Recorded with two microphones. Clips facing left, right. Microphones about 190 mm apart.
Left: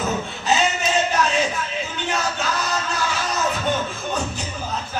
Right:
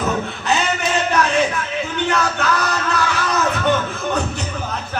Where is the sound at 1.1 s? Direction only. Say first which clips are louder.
Right 3 dB; 60° right (ahead or behind).